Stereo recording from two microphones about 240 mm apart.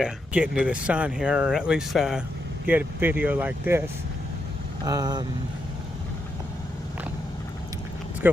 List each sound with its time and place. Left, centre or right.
0.0 s speech: centre
4.9 s speech: centre
8.2 s speech: centre